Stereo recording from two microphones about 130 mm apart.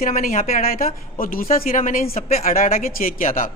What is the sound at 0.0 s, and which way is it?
A woman's voice, 85° left.